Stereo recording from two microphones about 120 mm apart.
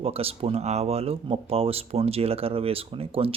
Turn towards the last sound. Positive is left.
turn(degrees=-50)  # may be behind; listen again after turning